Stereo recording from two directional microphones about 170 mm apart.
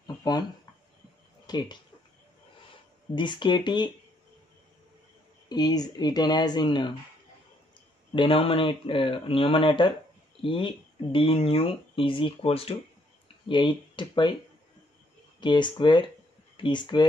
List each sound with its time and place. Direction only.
0.0 s a sound: 25° left (ahead or behind)
1.5 s speech: 25° left (ahead or behind)
3.2 s speech: 30° left (ahead or behind)
5.5 s speech: 25° left (ahead or behind)
8.1 s speech: 30° left (ahead or behind)
15.4 s speech: 25° left (ahead or behind)